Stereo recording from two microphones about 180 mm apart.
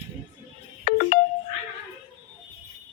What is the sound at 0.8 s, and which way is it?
Telephone dialing, 55° left (ahead or behind).